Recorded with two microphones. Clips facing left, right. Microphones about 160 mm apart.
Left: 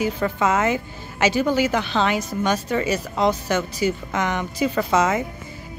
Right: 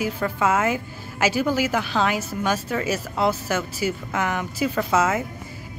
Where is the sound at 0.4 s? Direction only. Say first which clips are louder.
Even; 5° right (ahead or behind).